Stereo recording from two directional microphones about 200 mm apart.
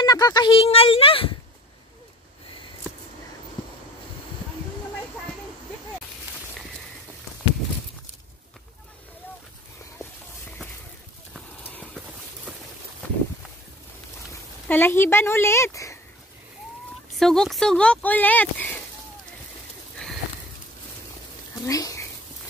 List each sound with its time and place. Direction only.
0.0 s speech: 20° left (ahead or behind)
11.7 s horse: 5° left (ahead or behind)
12.5 s a sound: 5° right (ahead or behind)
14.7 s a woman's voice: 10° left (ahead or behind)
17.1 s speech: centre (ahead or behind)
20.0 s a sound: 5° left (ahead or behind)
21.6 s speech: 15° left (ahead or behind)